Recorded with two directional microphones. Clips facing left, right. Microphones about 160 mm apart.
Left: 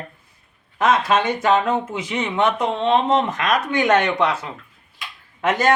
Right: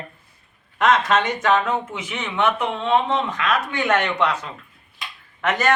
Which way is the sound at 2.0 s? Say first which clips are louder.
Left 2 dB; 35° left (ahead or behind).